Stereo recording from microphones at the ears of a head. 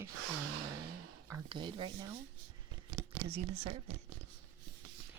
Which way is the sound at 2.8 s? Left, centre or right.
Right.